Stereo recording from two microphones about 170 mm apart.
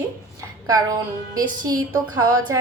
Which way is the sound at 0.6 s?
20° right (ahead or behind).